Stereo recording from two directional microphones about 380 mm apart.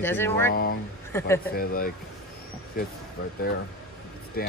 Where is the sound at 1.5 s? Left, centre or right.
Left.